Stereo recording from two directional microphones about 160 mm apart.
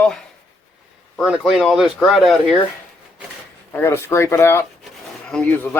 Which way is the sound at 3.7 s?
15° left (ahead or behind).